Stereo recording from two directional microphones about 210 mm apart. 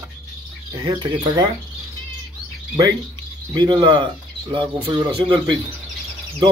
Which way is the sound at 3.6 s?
20° right (ahead or behind).